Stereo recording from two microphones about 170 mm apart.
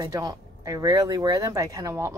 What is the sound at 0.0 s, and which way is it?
Speech, 20° right (ahead or behind).